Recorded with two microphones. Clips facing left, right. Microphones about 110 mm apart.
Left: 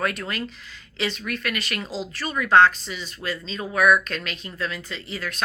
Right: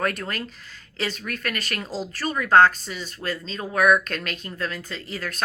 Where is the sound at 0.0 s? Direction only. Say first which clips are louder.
Even; 45° right (ahead or behind).